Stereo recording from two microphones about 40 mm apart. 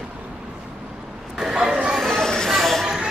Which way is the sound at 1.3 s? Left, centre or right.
Centre.